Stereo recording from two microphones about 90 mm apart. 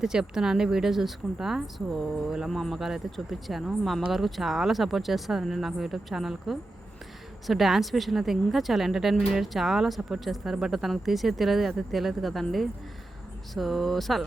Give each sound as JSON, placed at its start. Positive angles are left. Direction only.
{"t": 0.0, "sound": "speech", "side_deg": -5}